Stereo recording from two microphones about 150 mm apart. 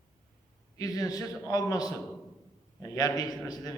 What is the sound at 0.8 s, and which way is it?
A man's voice, 25° left (ahead or behind).